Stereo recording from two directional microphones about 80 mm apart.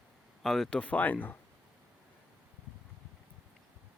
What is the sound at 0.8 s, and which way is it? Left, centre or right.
Speech, centre.